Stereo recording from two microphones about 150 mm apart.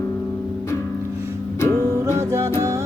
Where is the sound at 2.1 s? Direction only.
20° right (ahead or behind).